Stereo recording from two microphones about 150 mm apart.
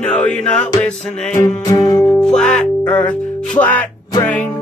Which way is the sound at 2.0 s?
5° left (ahead or behind).